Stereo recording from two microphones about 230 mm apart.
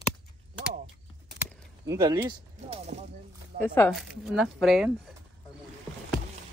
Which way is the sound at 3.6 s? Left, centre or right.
Centre.